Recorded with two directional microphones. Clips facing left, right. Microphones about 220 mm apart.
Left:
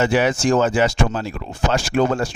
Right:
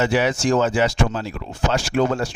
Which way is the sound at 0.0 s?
50° left (ahead or behind).